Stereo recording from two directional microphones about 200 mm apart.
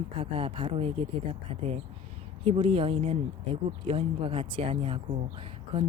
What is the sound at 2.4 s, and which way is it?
A woman's voice, 25° right (ahead or behind).